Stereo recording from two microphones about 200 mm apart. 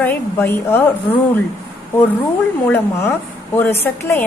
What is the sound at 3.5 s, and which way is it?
Speech, 10° left (ahead or behind).